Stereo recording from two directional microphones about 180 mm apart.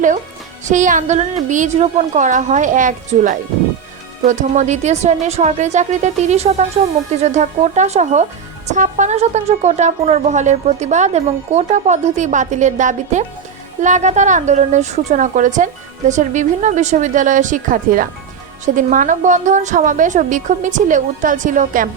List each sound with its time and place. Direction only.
0.6 s speech: 45° right (ahead or behind)